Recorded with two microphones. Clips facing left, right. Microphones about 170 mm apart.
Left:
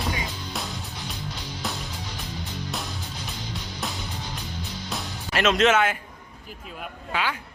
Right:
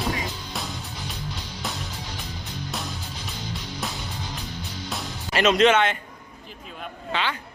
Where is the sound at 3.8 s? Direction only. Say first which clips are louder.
Left 1 dB; centre (ahead or behind).